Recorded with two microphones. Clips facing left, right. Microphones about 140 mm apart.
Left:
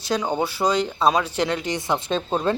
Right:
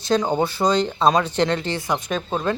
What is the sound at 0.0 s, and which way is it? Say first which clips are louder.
Speech: right 3 dB; 5° left (ahead or behind).